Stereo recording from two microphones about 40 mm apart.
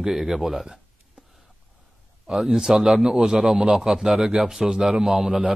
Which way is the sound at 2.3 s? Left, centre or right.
Centre.